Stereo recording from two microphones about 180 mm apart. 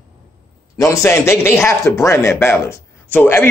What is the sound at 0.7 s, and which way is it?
A man's voice, 15° left (ahead or behind).